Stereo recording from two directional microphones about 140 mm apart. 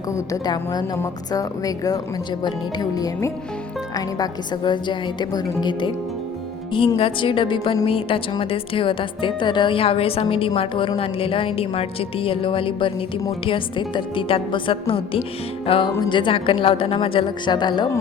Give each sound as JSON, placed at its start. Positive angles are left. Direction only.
{"t": 0.1, "sound": "a woman's voice", "side_deg": 25}